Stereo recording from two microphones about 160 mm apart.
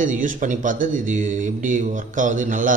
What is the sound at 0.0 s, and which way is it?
A man's voice, 55° right (ahead or behind).